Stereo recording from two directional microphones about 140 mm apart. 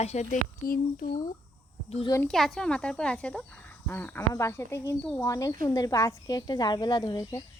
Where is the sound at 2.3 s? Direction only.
5° left (ahead or behind).